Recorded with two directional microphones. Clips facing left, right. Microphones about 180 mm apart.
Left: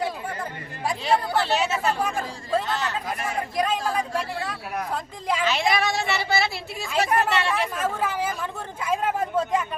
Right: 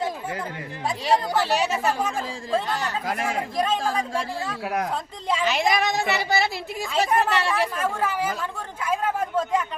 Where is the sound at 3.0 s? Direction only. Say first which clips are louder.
Right 3 dB; 90° right.